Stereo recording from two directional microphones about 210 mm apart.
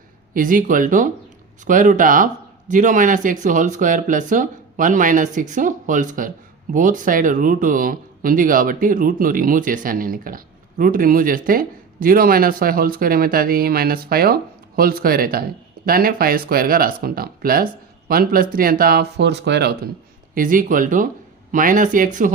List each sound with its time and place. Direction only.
0.3 s speech: 40° right (ahead or behind)
20.3 s speech: 40° right (ahead or behind)